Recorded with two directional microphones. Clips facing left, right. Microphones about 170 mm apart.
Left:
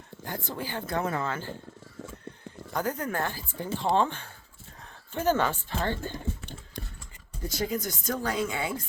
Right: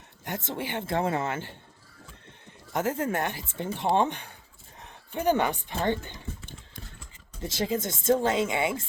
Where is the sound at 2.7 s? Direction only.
25° right (ahead or behind).